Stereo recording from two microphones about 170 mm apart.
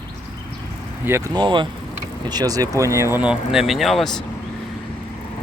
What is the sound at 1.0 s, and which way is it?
Speech, 15° right (ahead or behind).